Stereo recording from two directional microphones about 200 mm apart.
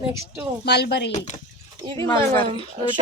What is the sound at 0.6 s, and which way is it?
Speech, 55° left (ahead or behind).